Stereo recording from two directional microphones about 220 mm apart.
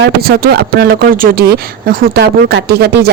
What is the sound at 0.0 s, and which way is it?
A woman's voice, 45° right (ahead or behind).